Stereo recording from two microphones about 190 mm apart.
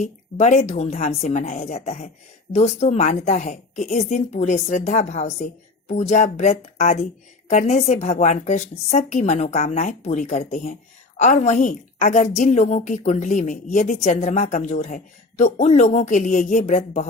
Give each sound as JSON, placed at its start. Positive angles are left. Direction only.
{"t": 0.0, "sound": "a woman's voice", "side_deg": 35}